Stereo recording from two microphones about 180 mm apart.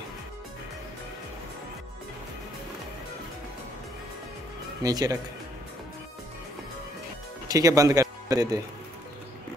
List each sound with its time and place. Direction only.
4.8 s speech: 20° right (ahead or behind)
7.4 s speech: 20° right (ahead or behind)